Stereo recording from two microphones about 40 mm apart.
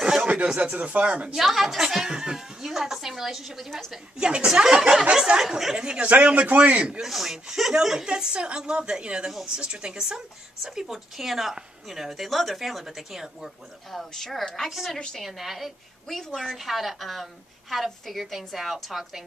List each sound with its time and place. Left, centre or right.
0.0 s a sound: centre
0.6 s speech: right
1.3 s a woman's voice: centre
4.2 s a woman's voice: right
5.5 s speech: centre
5.8 s a woman's voice: right
6.5 s a man's voice: right
7.0 s a woman's voice: centre
13.8 s a woman's voice: centre